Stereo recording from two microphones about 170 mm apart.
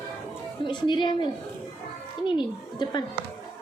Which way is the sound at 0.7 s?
25° left (ahead or behind).